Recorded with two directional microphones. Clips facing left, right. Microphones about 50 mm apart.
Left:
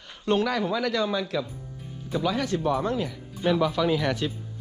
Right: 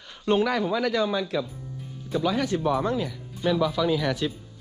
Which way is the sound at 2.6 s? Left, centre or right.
Right.